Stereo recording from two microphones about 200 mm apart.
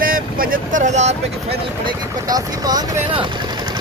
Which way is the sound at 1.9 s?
20° right (ahead or behind).